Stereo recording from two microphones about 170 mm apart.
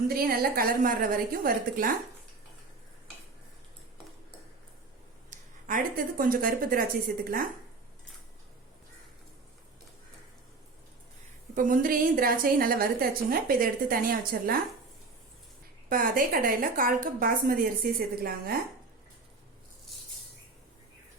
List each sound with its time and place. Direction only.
0.1 s speech: 60° right (ahead or behind)
5.3 s speech: 50° right (ahead or behind)
11.5 s speech: 55° right (ahead or behind)
15.9 s speech: 55° right (ahead or behind)